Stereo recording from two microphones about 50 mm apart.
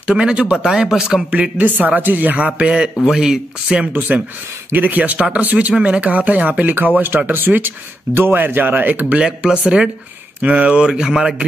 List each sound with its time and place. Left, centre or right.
0.2 s speech: centre
1.3 s a man's voice: right
4.7 s a man's voice: right
9.1 s a man's voice: right